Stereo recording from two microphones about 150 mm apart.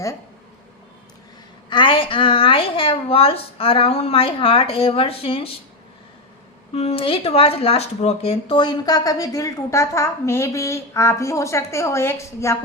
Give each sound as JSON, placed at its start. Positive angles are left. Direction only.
{"t": 1.7, "sound": "a woman's voice", "side_deg": 35}
{"t": 6.7, "sound": "speech", "side_deg": 40}